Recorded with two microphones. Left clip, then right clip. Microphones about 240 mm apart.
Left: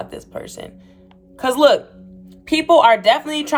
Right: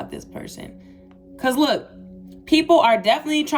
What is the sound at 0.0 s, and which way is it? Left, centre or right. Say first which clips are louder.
Speech: left 4 dB; left.